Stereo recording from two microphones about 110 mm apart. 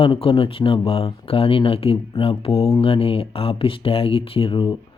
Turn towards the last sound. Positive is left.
turn(degrees=45)  # may be behind; listen again after turning